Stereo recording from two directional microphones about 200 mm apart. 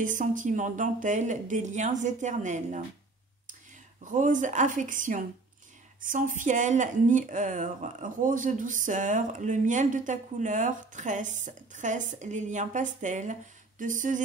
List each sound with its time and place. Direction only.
0.0 s speech: 40° right (ahead or behind)
4.0 s speech: 40° right (ahead or behind)